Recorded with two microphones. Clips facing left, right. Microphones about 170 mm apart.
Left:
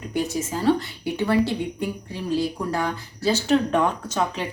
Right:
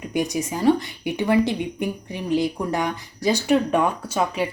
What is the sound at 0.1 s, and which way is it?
A woman's voice, 15° right (ahead or behind).